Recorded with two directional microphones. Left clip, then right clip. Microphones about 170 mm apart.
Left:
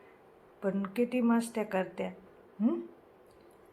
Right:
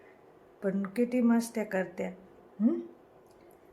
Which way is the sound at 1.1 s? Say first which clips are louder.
Right 2 dB; 15° right (ahead or behind).